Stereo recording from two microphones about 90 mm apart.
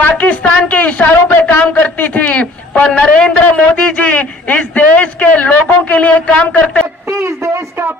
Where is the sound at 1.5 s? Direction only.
20° left (ahead or behind).